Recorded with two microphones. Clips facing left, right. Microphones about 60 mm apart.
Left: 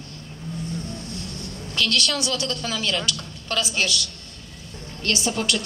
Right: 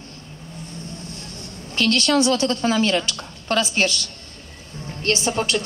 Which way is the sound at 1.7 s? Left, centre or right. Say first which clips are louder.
Right 6 dB; right.